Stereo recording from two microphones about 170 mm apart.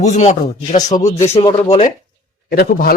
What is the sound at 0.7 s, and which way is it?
Speech, 20° left (ahead or behind).